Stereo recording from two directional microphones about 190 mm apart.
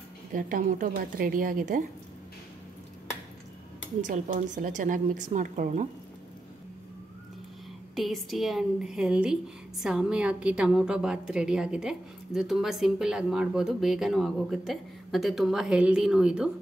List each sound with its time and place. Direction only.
0.3 s speech: 45° right (ahead or behind)
4.0 s speech: 45° right (ahead or behind)
7.9 s a woman's voice: centre (ahead or behind)